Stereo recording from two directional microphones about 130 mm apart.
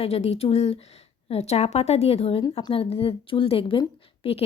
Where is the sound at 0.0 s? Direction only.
55° left (ahead or behind).